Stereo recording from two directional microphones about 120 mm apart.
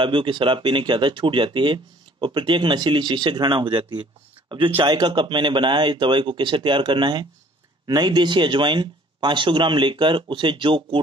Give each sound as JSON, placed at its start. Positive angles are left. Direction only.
{"t": 0.0, "sound": "speech", "side_deg": -45}